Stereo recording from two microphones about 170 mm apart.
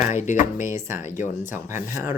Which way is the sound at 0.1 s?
45° left (ahead or behind).